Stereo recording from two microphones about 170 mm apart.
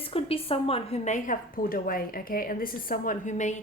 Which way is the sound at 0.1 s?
35° left (ahead or behind).